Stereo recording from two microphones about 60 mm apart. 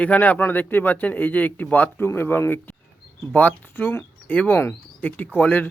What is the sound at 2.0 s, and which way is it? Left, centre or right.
Speech, left.